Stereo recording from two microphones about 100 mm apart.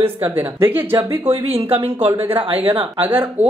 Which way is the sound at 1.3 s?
70° right (ahead or behind).